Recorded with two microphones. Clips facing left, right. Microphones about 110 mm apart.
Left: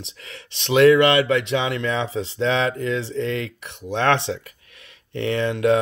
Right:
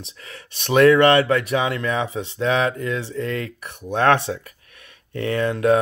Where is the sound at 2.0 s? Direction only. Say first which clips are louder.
Left 1 dB; 30° left (ahead or behind).